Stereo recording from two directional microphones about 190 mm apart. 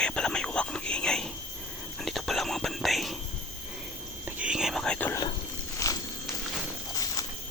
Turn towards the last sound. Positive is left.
turn(degrees=15)  # may be behind; listen again after turning